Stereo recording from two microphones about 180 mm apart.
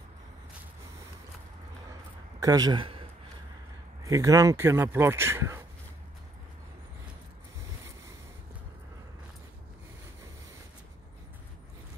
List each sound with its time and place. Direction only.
2.4 s a man's voice: 20° right (ahead or behind)
4.0 s speech: 20° right (ahead or behind)